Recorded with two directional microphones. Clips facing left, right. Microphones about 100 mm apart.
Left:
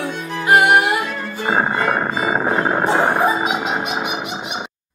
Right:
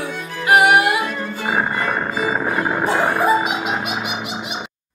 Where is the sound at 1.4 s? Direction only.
25° left (ahead or behind).